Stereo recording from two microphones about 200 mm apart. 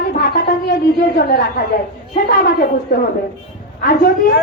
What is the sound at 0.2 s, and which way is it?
A woman's voice, 50° left (ahead or behind).